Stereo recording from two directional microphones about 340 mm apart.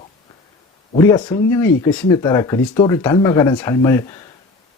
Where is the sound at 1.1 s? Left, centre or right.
Centre.